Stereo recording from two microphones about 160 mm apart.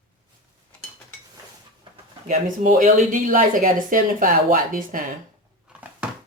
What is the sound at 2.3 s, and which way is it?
A woman's voice, 50° right (ahead or behind).